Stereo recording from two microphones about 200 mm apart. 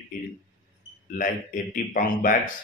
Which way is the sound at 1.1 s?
45° left (ahead or behind).